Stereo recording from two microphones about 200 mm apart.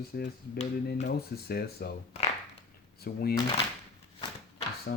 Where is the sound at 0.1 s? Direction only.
50° left (ahead or behind).